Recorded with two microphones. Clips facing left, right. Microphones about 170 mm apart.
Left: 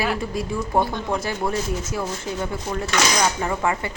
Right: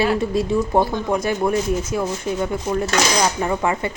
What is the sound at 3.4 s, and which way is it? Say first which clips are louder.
Speech: right 3 dB; 20° right (ahead or behind).